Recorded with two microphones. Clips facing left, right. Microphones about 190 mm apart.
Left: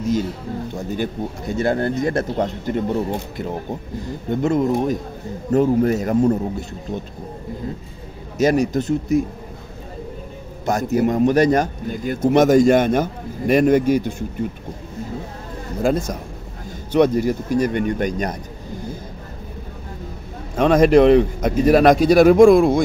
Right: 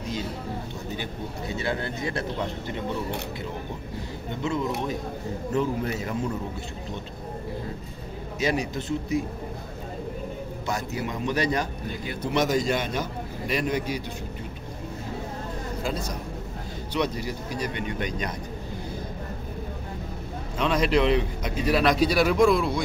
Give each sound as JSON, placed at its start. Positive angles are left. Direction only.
{"t": 0.7, "sound": "a man's voice", "side_deg": 45}
{"t": 4.3, "sound": "a man's voice", "side_deg": 50}
{"t": 8.4, "sound": "a man's voice", "side_deg": 45}
{"t": 10.6, "sound": "a man's voice", "side_deg": 45}
{"t": 15.8, "sound": "a man's voice", "side_deg": 50}
{"t": 20.5, "sound": "a man's voice", "side_deg": 50}